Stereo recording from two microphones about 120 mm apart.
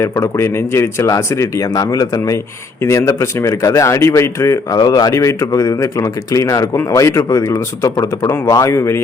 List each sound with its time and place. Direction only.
0.0 s speech: 20° left (ahead or behind)